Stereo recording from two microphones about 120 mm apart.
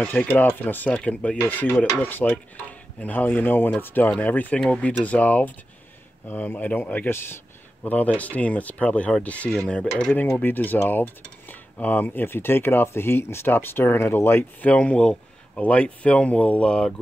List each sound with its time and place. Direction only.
0.0 s cutlery: 15° left (ahead or behind)